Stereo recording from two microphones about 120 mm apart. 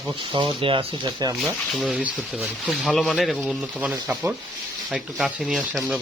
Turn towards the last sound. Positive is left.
turn(degrees=0)  # may be behind; listen again after turning